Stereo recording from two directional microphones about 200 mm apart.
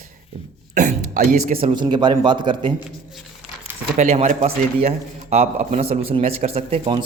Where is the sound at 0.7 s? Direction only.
40° right (ahead or behind).